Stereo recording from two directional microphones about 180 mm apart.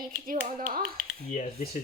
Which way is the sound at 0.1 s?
50° right (ahead or behind).